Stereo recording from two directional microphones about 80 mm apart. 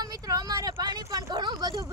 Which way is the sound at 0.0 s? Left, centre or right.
Right.